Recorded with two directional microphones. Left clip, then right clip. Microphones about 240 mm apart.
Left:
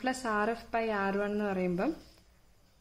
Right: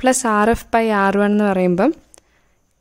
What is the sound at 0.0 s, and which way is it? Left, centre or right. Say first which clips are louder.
A woman's voice: right 16 dB; right.